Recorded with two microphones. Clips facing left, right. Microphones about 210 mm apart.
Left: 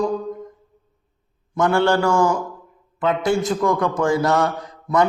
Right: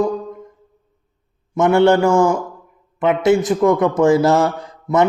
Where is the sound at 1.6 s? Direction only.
20° right (ahead or behind).